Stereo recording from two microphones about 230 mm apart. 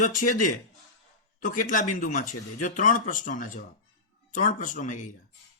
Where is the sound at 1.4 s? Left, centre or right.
Left.